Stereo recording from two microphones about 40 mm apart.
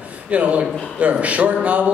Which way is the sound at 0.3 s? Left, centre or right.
Right.